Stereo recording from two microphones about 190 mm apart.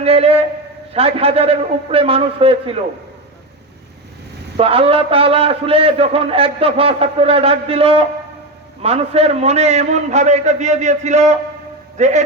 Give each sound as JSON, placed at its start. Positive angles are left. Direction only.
{"t": 0.0, "sound": "a man's voice", "side_deg": -30}
{"t": 4.5, "sound": "a man's voice", "side_deg": -30}